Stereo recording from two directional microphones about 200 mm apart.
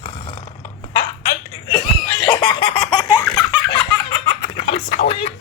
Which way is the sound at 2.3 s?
25° left (ahead or behind).